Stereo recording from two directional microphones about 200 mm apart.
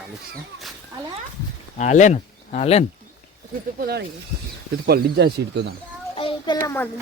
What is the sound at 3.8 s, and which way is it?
Speech, 55° right (ahead or behind).